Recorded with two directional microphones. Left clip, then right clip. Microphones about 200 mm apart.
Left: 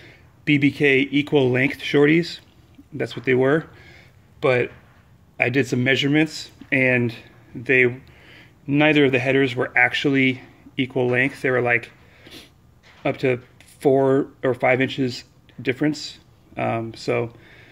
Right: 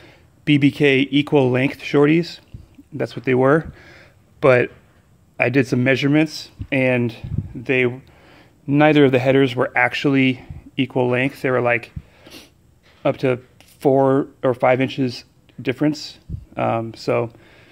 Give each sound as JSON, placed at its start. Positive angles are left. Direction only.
{"t": 0.0, "sound": "speech", "side_deg": -20}
{"t": 8.2, "sound": "a sound", "side_deg": -90}
{"t": 8.6, "sound": "speech", "side_deg": -25}